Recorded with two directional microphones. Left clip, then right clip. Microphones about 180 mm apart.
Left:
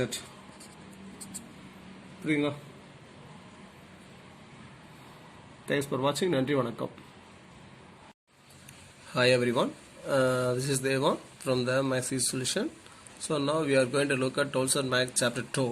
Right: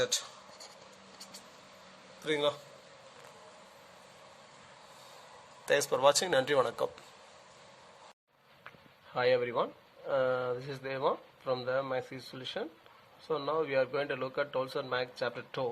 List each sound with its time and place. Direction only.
5.6 s speech: 55° right (ahead or behind)
9.1 s a man's voice: 30° right (ahead or behind)